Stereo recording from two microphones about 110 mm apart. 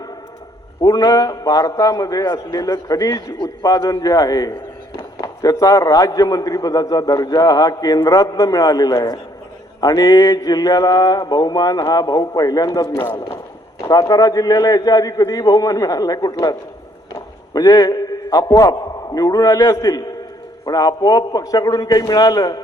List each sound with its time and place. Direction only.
0.8 s a man's voice: 35° left (ahead or behind)